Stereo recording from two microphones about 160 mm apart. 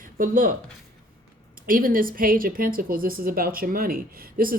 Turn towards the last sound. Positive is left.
turn(degrees=-65)  # may be behind; listen again after turning